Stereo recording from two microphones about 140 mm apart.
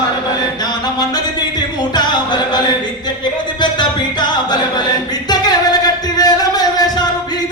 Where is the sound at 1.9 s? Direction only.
30° left (ahead or behind).